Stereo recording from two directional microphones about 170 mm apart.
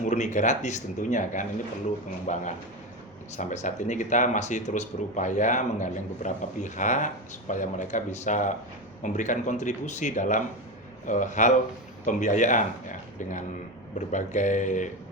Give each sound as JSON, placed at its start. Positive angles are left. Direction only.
{"t": 0.0, "sound": "speech", "side_deg": 45}
{"t": 14.1, "sound": "speech", "side_deg": 45}